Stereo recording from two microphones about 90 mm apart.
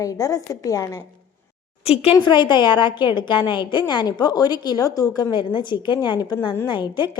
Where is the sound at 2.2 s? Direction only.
60° left (ahead or behind).